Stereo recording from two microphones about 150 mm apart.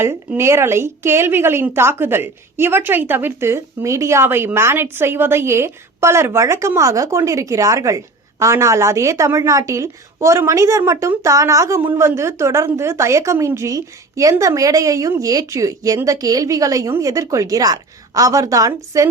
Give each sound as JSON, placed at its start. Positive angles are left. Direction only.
{"t": 0.0, "sound": "a woman's voice", "side_deg": -15}